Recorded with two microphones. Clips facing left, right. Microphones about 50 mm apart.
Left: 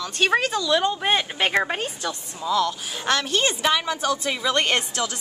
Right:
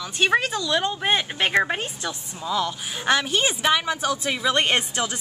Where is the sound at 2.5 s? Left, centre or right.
Centre.